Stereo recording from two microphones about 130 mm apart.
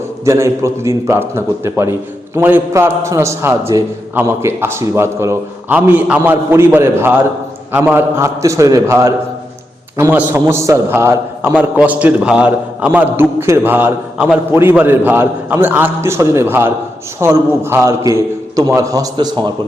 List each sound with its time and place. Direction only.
0.3 s a man's voice: 20° right (ahead or behind)